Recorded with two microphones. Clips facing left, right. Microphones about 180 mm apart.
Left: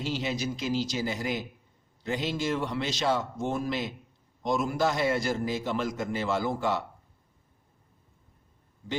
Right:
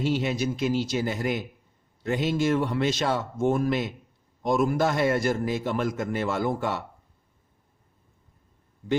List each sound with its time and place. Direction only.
0.0 s a man's voice: 55° right (ahead or behind)